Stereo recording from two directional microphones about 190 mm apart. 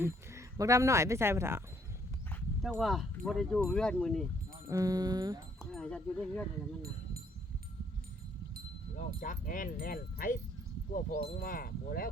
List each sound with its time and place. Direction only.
0.0 s speech: 15° right (ahead or behind)
2.3 s dog: centre (ahead or behind)
3.2 s speech: centre (ahead or behind)
4.7 s speech: 20° right (ahead or behind)
5.7 s speech: 5° left (ahead or behind)
9.0 s speech: 45° left (ahead or behind)